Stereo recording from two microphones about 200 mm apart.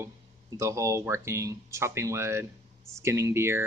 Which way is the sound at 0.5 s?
15° right (ahead or behind).